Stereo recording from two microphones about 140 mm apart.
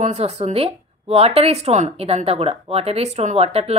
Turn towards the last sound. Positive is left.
turn(degrees=-45)  # may be behind; listen again after turning